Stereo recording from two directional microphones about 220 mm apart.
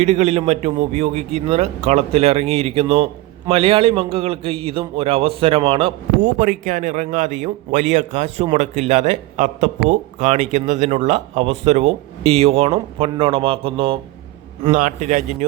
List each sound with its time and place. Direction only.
0.0 s a man's voice: 30° right (ahead or behind)